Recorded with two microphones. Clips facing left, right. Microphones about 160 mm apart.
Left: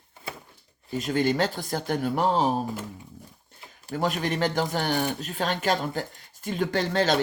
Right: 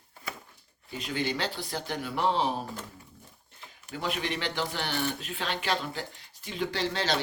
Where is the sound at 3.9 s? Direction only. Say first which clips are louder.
Left 6 dB; 40° left (ahead or behind).